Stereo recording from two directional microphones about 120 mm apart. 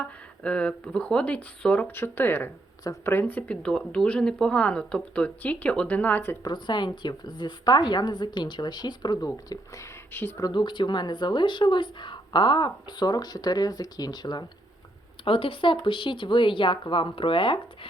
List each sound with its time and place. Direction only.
0.0 s speech: 10° left (ahead or behind)
6.4 s speech: 40° left (ahead or behind)
10.1 s speech: 15° left (ahead or behind)
10.3 s speech: 35° left (ahead or behind)
15.2 s speech: 50° left (ahead or behind)